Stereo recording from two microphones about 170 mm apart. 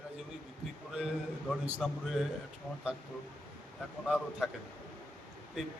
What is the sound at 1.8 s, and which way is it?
Speech, centre (ahead or behind).